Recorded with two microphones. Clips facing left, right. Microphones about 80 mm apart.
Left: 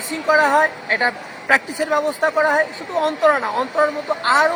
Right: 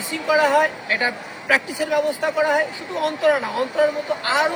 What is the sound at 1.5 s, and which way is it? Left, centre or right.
Speech, left.